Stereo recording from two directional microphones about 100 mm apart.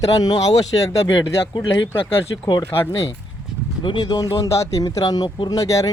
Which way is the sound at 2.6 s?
25° left (ahead or behind).